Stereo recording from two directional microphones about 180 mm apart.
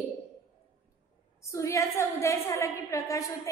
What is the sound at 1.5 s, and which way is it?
A woman's voice, 15° left (ahead or behind).